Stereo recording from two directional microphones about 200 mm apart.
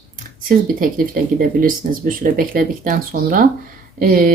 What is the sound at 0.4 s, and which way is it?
Speech, 45° right (ahead or behind).